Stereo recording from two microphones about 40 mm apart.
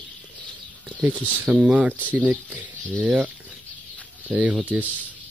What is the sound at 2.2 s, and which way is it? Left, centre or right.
Speech, right.